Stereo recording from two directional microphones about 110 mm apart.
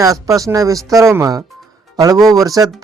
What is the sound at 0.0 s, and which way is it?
Speech, 30° right (ahead or behind).